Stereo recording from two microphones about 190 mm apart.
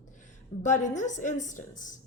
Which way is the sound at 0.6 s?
40° left (ahead or behind).